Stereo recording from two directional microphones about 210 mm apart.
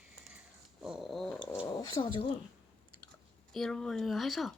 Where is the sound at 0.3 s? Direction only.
5° right (ahead or behind).